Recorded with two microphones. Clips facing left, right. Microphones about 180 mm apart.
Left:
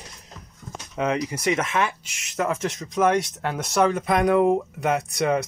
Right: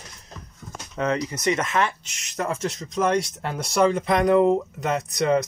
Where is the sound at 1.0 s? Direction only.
10° left (ahead or behind).